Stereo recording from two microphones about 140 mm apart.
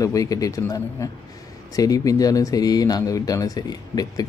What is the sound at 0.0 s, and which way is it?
Speech, 25° left (ahead or behind).